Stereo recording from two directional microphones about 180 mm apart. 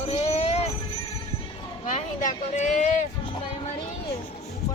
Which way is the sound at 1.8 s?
45° left (ahead or behind).